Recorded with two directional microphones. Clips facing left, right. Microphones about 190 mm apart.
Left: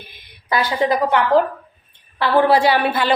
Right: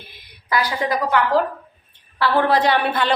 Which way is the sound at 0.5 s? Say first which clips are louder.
Left 3 dB; 25° left (ahead or behind).